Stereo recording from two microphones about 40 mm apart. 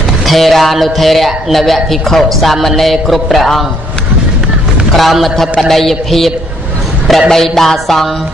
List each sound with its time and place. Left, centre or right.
0.3 s speech: centre
4.9 s speech: centre
7.2 s music: centre